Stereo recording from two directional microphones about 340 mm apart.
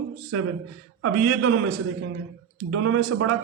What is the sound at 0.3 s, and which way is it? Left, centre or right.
Speech, right.